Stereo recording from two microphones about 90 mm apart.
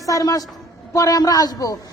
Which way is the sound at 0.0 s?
40° left (ahead or behind).